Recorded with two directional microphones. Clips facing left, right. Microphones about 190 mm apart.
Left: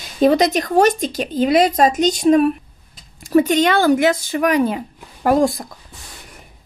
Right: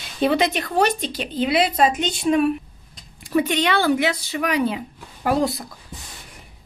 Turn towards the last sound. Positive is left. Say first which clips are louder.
# left 5 dB
turn(degrees=45)  # may be behind; listen again after turning